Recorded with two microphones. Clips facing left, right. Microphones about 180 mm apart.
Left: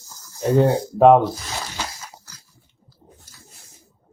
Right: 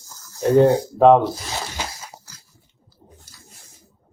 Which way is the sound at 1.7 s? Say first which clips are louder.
Right 1 dB; 10° right (ahead or behind).